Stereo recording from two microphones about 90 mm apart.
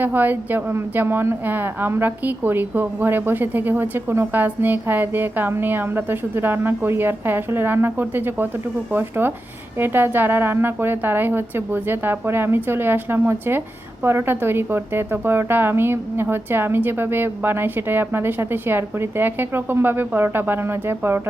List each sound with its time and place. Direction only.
0.0 s a woman's voice: 20° right (ahead or behind)